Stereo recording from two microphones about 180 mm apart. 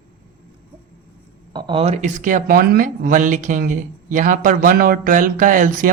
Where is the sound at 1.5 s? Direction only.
25° right (ahead or behind).